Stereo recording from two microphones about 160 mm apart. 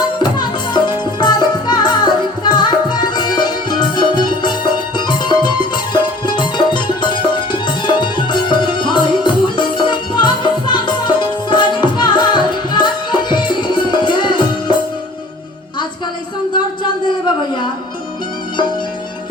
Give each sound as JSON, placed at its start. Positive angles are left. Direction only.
{"t": 0.2, "sound": "music", "side_deg": 25}